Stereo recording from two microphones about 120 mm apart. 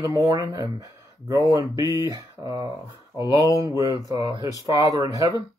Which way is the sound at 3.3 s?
30° left (ahead or behind).